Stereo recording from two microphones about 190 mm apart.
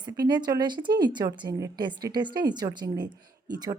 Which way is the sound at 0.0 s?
20° right (ahead or behind).